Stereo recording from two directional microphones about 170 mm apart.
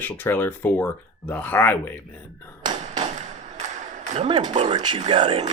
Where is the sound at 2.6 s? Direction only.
30° right (ahead or behind).